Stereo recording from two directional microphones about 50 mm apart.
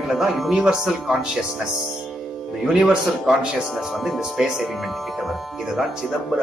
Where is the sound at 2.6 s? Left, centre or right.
Centre.